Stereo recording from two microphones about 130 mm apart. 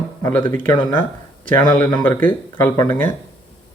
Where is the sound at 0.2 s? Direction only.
15° left (ahead or behind).